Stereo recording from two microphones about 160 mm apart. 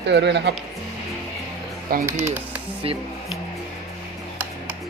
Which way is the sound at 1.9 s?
70° right (ahead or behind).